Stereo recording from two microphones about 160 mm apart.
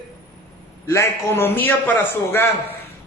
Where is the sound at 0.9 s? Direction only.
15° left (ahead or behind).